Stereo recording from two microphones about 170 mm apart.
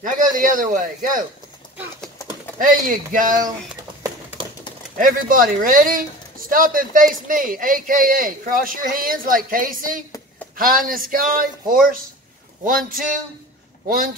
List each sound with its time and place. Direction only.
0.0 s speech: 50° right (ahead or behind)
2.6 s speech: 50° right (ahead or behind)
4.9 s speech: 55° right (ahead or behind)
12.6 s speech: 55° right (ahead or behind)